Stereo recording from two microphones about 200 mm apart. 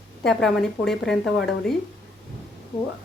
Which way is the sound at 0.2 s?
5° left (ahead or behind).